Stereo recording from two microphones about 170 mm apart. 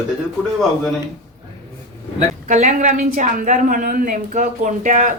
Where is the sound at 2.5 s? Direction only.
45° right (ahead or behind).